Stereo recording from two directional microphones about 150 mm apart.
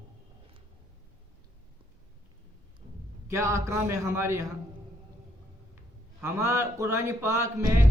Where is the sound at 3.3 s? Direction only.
20° right (ahead or behind).